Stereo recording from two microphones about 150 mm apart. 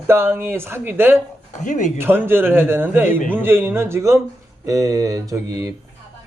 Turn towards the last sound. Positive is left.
turn(degrees=-20)  # may be behind; listen again after turning